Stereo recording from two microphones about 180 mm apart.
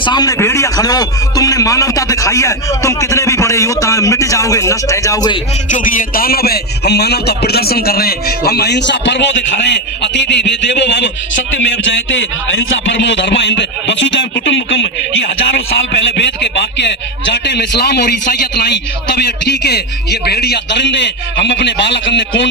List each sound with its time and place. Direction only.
0.0 s a man's voice: 25° left (ahead or behind)
5.7 s a man's voice: 50° left (ahead or behind); by 14.8 s 90° left
17.7 s a man's voice: 65° left (ahead or behind); by 22.4 s 85° left